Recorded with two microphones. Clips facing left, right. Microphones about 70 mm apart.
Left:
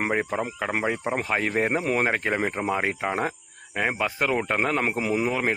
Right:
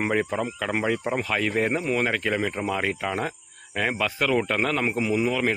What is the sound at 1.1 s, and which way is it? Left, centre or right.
Speech, left.